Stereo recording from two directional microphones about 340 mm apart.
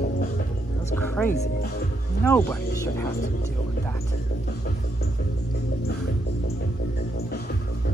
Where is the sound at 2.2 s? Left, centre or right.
Centre.